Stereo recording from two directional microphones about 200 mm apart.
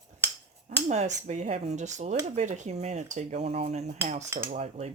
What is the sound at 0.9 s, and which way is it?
Speech, 35° right (ahead or behind).